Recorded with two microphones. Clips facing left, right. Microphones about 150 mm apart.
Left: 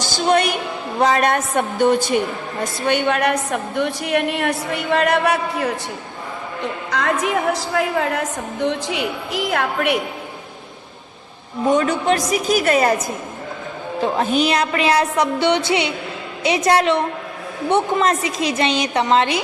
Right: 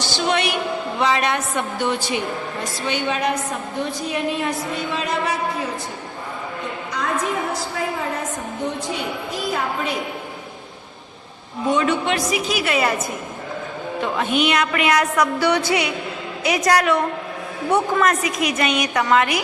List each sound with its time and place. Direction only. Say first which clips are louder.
0.0 s a woman's voice: left 4 dB; 45° left (ahead or behind); by 5.7 s 65° left (ahead or behind)
6.9 s a woman's voice: left 4 dB; 90° left; by 10.0 s 70° left (ahead or behind)
11.7 s a woman's voice: left 3 dB; 40° left (ahead or behind)